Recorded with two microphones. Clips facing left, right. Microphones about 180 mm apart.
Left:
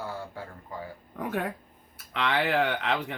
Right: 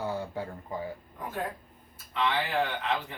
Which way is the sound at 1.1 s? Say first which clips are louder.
Left 7 dB; 70° left (ahead or behind).